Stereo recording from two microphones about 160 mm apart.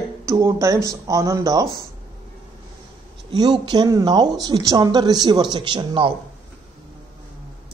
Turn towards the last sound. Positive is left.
turn(degrees=-30)  # may be behind; listen again after turning